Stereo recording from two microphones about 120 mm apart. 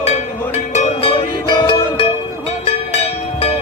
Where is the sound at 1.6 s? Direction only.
50° left (ahead or behind).